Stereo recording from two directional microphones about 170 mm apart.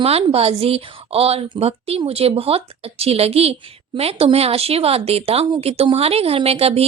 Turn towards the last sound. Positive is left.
turn(degrees=-35)  # may be behind; listen again after turning